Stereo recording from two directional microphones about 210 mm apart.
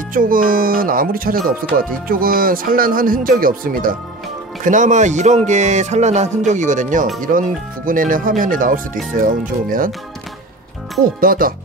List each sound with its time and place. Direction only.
0.1 s speech: 40° right (ahead or behind)
11.1 s speech: 45° right (ahead or behind)